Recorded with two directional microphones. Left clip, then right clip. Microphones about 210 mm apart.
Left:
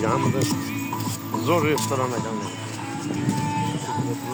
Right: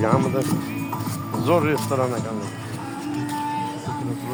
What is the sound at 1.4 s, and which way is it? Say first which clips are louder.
Speech: right 1 dB; 50° right (ahead or behind).